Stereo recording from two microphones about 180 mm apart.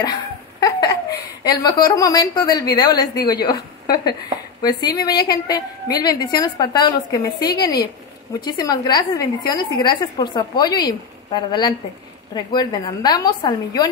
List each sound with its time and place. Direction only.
0.0 s laughter: 20° left (ahead or behind)
1.4 s a woman's voice: 25° left (ahead or behind)